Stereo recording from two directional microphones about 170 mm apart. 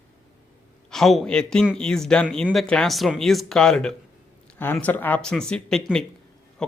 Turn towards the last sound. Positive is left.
turn(degrees=5)  # may be behind; listen again after turning